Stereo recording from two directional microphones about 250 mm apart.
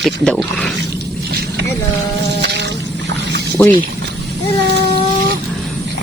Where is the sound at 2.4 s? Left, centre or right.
Right.